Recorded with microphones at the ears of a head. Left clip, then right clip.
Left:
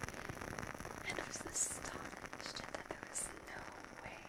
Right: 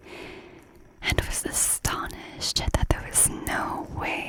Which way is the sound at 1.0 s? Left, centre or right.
Right.